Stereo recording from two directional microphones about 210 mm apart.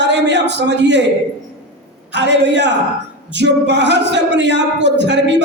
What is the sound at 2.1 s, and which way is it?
Speech, 55° right (ahead or behind).